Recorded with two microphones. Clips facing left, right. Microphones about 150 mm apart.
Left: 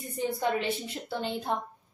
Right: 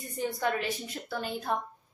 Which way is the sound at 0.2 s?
20° left (ahead or behind).